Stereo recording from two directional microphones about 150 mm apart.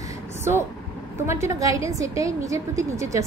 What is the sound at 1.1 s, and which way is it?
A woman's voice, 20° right (ahead or behind).